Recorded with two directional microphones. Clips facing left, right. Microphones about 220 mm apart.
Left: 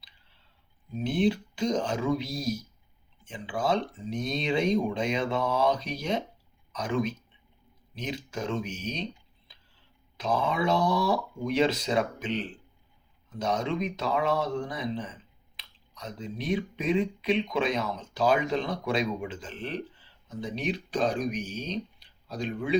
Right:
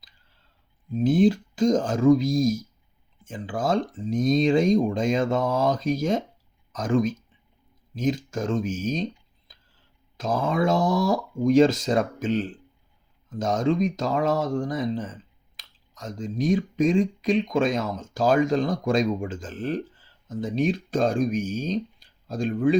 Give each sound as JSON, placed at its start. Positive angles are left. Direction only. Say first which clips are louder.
{"t": 0.9, "sound": "speech", "louder": "right 7 dB", "side_deg": -45}
{"t": 10.2, "sound": "speech", "louder": "right 4 dB", "side_deg": -45}